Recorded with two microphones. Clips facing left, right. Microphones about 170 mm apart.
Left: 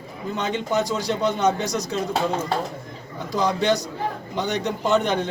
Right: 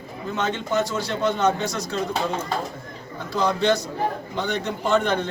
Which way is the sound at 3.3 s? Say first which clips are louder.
Even; 15° left (ahead or behind).